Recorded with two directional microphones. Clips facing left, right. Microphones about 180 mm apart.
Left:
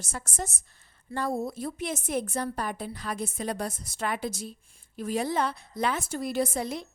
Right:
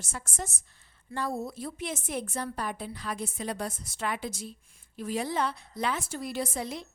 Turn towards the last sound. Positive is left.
turn(degrees=45)  # may be behind; listen again after turning